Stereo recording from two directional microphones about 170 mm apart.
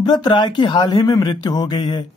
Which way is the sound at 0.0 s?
25° left (ahead or behind).